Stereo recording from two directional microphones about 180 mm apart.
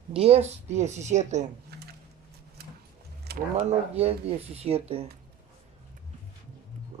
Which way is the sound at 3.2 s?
60° right (ahead or behind).